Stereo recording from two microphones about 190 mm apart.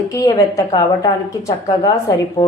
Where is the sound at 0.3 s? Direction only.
20° left (ahead or behind).